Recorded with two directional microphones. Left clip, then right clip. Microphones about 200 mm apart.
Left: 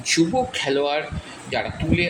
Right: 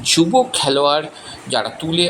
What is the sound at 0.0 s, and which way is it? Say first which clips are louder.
Speech: right 6 dB; 25° right (ahead or behind).